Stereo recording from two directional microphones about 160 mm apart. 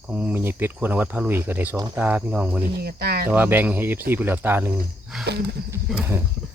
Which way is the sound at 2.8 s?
80° right.